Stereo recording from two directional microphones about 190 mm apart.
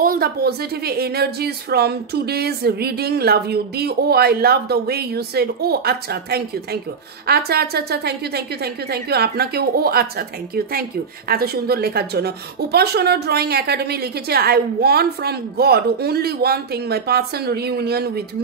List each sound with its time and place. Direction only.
0.0 s a woman's voice: 50° right (ahead or behind)